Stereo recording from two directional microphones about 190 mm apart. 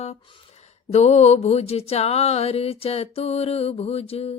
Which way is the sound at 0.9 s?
35° left (ahead or behind).